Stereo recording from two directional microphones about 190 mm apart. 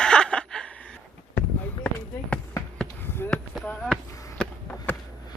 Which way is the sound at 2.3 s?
10° left (ahead or behind).